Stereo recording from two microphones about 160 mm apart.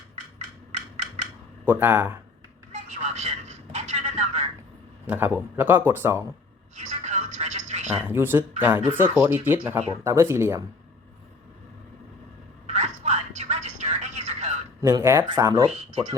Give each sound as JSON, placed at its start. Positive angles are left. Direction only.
{"t": 1.6, "sound": "speech", "side_deg": -15}
{"t": 2.7, "sound": "a sound", "side_deg": -45}
{"t": 5.0, "sound": "speech", "side_deg": -10}
{"t": 6.7, "sound": "a sound", "side_deg": -45}
{"t": 8.0, "sound": "speech", "side_deg": -15}
{"t": 12.6, "sound": "telephone", "side_deg": -45}
{"t": 14.8, "sound": "speech", "side_deg": -20}
{"t": 15.6, "sound": "speech", "side_deg": -35}